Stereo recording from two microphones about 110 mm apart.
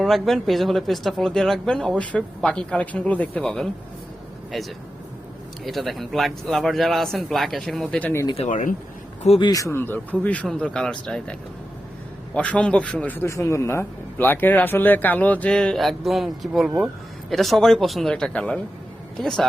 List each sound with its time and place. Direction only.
0.0 s speech: centre (ahead or behind)
9.5 s speech: 30° left (ahead or behind)
9.7 s a man's voice: 20° left (ahead or behind)